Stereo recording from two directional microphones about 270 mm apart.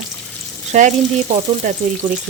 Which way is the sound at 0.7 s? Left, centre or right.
Right.